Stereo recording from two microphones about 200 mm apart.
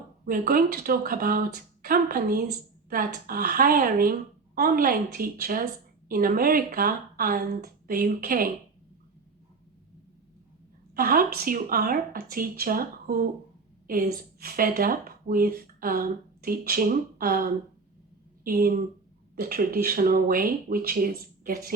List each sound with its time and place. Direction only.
0.3 s speech: 45° right (ahead or behind)
10.9 s speech: 45° right (ahead or behind)